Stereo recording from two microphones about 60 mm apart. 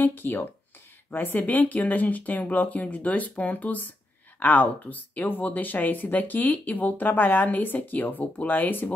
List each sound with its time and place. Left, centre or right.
0.0 s speech: left